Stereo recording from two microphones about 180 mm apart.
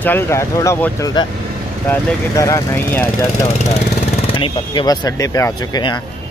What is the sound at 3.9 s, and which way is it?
Speech, 30° left (ahead or behind).